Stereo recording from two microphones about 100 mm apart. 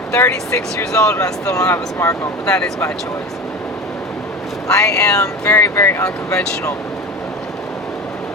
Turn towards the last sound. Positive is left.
turn(degrees=30)  # may be behind; listen again after turning